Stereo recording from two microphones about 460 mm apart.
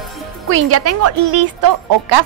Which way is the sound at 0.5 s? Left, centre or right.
Right.